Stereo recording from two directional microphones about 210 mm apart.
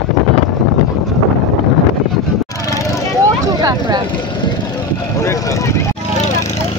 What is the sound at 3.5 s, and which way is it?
Vehicle, 20° right (ahead or behind).